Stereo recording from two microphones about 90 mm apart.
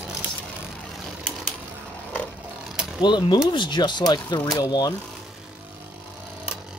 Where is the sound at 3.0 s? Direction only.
60° left (ahead or behind).